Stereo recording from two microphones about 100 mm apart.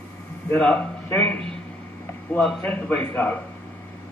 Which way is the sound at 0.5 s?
15° left (ahead or behind).